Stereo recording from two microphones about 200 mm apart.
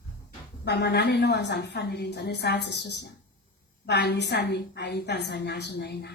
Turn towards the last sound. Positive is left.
turn(degrees=55)  # may be behind; listen again after turning